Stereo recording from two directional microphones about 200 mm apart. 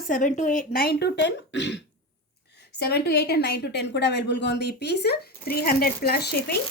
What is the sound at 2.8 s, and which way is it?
A woman's voice, 55° left (ahead or behind).